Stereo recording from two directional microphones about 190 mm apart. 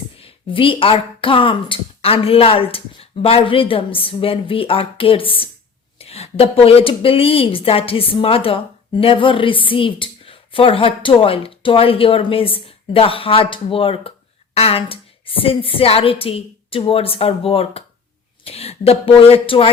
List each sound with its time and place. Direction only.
0.2 s a woman's voice: 30° left (ahead or behind)